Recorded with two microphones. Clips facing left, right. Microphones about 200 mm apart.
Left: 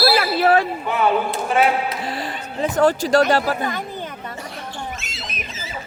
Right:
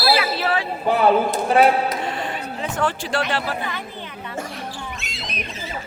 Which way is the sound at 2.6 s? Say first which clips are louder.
Left 8 dB; 40° left (ahead or behind).